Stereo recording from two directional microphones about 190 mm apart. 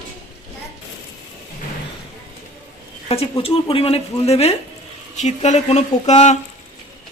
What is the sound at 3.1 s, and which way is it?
A woman's voice, 30° left (ahead or behind).